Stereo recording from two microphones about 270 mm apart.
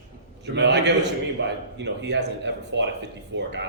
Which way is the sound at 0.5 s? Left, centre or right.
Right.